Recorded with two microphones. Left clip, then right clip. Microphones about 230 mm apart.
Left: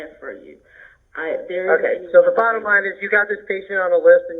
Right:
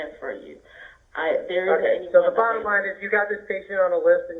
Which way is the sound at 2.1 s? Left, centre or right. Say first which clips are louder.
Left 6 dB; left.